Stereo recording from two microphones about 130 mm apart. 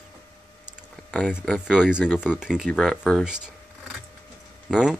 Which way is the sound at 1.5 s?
5° right (ahead or behind).